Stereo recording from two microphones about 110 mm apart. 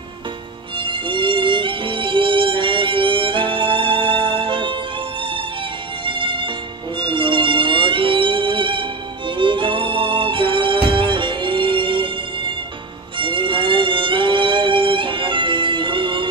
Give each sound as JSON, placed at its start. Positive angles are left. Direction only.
{"t": 0.7, "sound": "music", "side_deg": -50}
{"t": 6.0, "sound": "music", "side_deg": -50}